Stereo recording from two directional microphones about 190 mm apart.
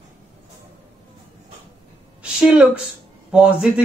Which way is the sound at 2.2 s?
5° right (ahead or behind).